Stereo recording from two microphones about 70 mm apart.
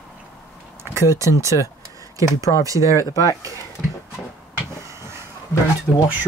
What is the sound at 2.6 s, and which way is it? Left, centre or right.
Speech, right.